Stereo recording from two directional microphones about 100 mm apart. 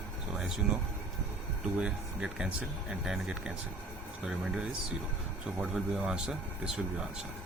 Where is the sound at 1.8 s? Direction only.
10° right (ahead or behind).